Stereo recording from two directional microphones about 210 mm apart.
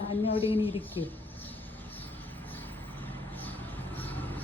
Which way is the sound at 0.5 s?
25° left (ahead or behind).